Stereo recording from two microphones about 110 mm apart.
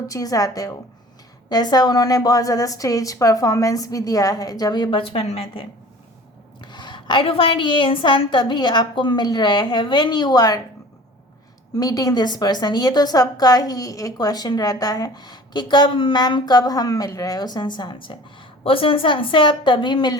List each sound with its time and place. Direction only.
0.1 s a woman's voice: 30° left (ahead or behind); by 5.6 s 65° left (ahead or behind)
6.6 s a woman's voice: 40° left (ahead or behind)
11.7 s a woman's voice: 35° left (ahead or behind)